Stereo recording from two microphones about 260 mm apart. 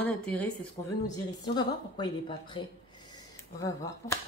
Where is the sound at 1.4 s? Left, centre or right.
Centre.